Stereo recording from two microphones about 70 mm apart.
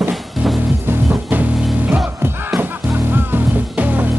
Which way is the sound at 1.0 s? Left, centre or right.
Right.